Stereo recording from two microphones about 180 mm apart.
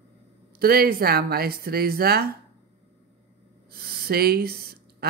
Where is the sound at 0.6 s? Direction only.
60° right (ahead or behind).